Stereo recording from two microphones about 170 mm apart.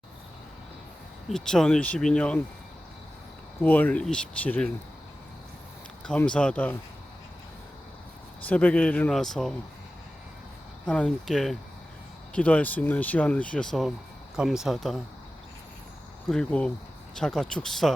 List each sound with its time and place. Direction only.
1.3 s speech: 5° left (ahead or behind)
3.6 s speech: 10° left (ahead or behind)
6.1 s speech: 5° left (ahead or behind)
8.4 s speech: 10° left (ahead or behind)
10.8 s speech: 5° left (ahead or behind)
16.3 s speech: 5° left (ahead or behind)